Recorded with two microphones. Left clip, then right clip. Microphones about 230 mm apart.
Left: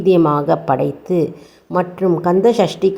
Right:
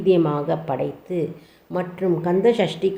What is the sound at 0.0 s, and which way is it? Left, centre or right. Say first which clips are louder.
Speech: left 6 dB; left.